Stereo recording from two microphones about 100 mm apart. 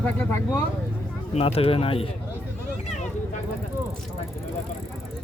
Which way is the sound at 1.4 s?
80° left.